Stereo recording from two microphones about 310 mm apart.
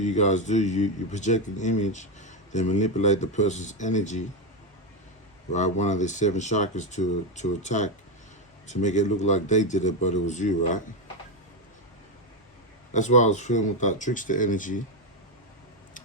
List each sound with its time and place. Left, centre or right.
0.0 s a man's voice: left
5.5 s a man's voice: left
12.9 s a man's voice: left